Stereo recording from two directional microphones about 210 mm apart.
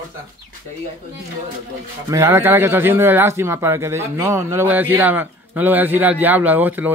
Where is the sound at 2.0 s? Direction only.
15° right (ahead or behind).